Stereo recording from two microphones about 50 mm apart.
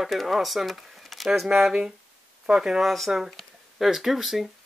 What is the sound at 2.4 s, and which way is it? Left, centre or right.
Speech, centre.